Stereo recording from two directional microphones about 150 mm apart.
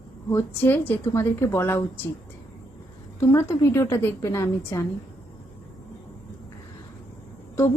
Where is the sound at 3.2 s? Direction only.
20° left (ahead or behind).